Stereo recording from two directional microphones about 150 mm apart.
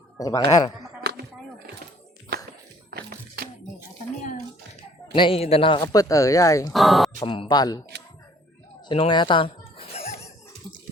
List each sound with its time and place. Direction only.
0.2 s speech: 25° left (ahead or behind)
1.0 s a sound: 90° right
2.9 s music: 90° right
5.1 s speech: 35° left (ahead or behind)
5.8 s speech: 25° left (ahead or behind)
6.7 s speech: centre (ahead or behind)
7.2 s speech: 30° left (ahead or behind)
8.9 s chuckle: 35° left (ahead or behind)